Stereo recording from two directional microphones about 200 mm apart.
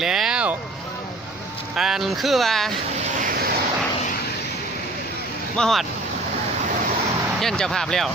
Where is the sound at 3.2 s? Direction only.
45° right (ahead or behind).